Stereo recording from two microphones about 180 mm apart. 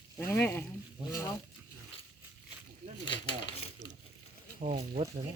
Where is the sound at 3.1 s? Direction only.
35° left (ahead or behind).